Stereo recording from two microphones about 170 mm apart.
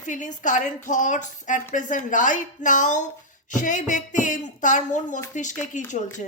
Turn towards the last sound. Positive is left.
turn(degrees=45)  # may be behind; listen again after turning